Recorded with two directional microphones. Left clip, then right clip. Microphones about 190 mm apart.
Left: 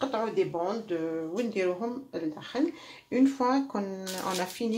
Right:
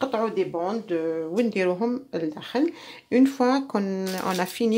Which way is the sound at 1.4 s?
55° right (ahead or behind).